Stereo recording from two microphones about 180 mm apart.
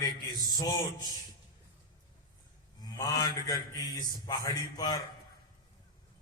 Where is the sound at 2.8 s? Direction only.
20° left (ahead or behind).